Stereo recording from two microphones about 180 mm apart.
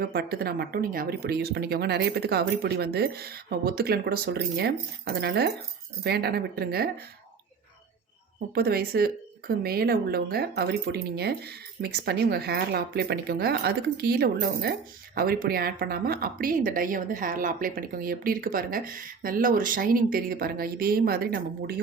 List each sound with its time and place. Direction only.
0.0 s a woman's voice: 60° right (ahead or behind)
8.5 s a woman's voice: 60° right (ahead or behind)